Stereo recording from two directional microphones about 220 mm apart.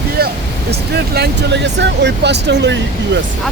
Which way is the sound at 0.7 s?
45° right (ahead or behind).